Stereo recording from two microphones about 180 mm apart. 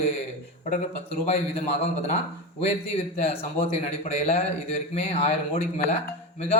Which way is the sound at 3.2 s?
35° left (ahead or behind).